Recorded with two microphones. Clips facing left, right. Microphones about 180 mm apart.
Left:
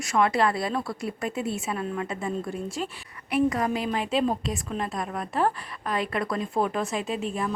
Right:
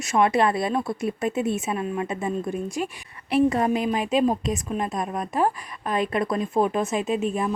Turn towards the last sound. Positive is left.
turn(degrees=-20)  # may be behind; listen again after turning